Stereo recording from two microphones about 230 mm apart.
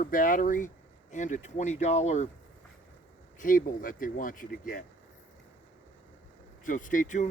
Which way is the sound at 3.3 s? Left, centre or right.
Left.